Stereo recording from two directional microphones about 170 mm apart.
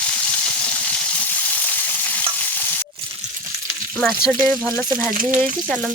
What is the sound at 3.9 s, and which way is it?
Frying, centre (ahead or behind).